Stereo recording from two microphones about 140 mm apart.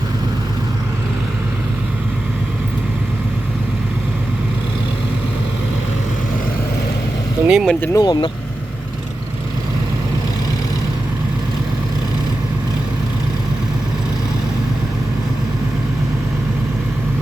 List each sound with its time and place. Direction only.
7.4 s speech: 5° right (ahead or behind)
7.9 s speech: 30° left (ahead or behind)